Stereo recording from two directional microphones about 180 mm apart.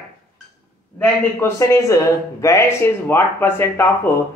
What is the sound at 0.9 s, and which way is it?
Speech, 15° left (ahead or behind).